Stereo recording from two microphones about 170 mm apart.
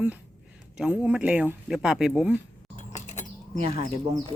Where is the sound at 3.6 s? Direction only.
35° right (ahead or behind).